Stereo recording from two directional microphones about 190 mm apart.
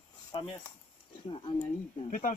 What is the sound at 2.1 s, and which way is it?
Speech, 45° left (ahead or behind).